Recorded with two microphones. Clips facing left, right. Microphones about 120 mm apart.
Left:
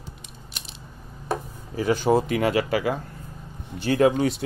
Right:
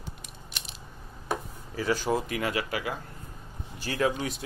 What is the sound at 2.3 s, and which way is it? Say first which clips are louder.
Speech: left 8 dB; 30° left (ahead or behind).